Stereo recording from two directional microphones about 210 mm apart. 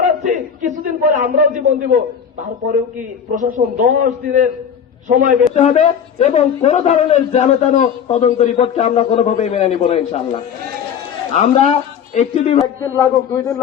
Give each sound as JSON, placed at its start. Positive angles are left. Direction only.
{"t": 0.8, "sound": "a sound", "side_deg": -40}
{"t": 1.5, "sound": "a man's voice", "side_deg": -40}
{"t": 3.3, "sound": "a man's voice", "side_deg": -40}
{"t": 5.5, "sound": "a man's voice", "side_deg": 35}
{"t": 12.8, "sound": "a man's voice", "side_deg": 20}